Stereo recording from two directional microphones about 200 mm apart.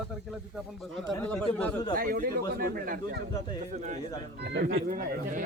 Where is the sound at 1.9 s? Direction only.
45° right (ahead or behind).